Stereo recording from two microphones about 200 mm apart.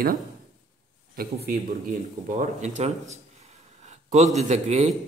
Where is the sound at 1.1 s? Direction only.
50° right (ahead or behind).